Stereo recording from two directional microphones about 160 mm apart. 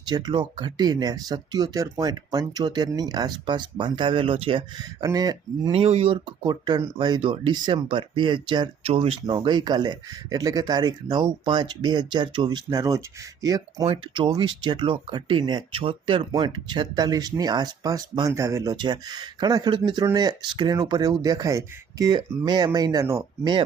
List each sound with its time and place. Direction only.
0.0 s speech: 25° right (ahead or behind)
5.7 s speech: 40° right (ahead or behind)